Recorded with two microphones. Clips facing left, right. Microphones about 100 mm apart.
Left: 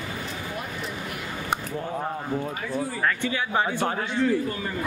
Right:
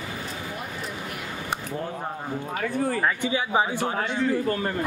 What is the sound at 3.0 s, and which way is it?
Speech, 10° right (ahead or behind).